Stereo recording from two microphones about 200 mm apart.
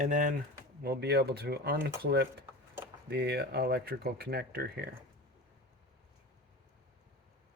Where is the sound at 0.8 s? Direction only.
55° right (ahead or behind).